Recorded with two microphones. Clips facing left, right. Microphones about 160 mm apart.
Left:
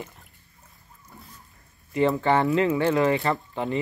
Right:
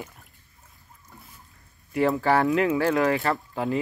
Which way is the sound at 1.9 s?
5° right (ahead or behind).